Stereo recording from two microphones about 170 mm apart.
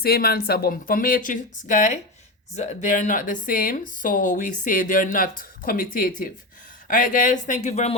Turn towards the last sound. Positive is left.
turn(degrees=40)  # may be behind; listen again after turning